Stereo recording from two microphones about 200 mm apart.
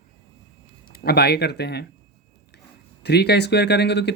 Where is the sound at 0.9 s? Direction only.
50° left (ahead or behind).